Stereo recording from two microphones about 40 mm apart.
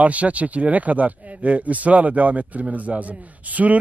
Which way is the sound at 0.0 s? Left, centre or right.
Right.